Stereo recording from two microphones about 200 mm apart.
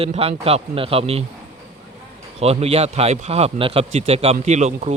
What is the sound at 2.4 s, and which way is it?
A man's voice, 30° right (ahead or behind).